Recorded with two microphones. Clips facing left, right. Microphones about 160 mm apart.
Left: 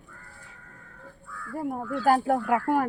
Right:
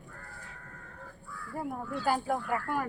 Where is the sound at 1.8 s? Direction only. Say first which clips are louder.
Left 8 dB; 90° left.